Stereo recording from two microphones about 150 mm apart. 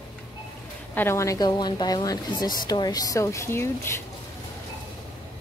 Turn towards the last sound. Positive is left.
turn(degrees=15)  # may be behind; listen again after turning